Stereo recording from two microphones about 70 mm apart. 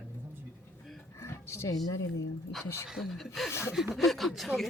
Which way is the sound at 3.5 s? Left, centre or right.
Left.